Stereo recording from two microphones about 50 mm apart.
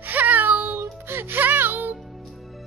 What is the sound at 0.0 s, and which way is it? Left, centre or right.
Music, right.